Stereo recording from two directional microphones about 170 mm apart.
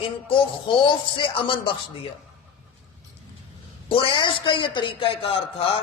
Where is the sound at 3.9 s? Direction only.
30° left (ahead or behind).